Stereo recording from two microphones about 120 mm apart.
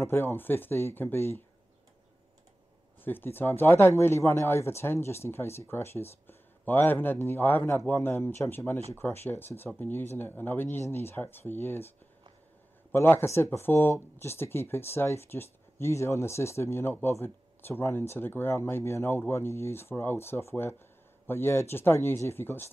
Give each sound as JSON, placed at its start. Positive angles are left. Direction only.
{"t": 0.0, "sound": "speech", "side_deg": 20}
{"t": 3.0, "sound": "speech", "side_deg": 15}
{"t": 12.9, "sound": "speech", "side_deg": 20}